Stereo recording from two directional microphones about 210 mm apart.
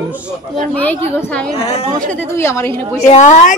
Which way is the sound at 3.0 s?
35° left (ahead or behind).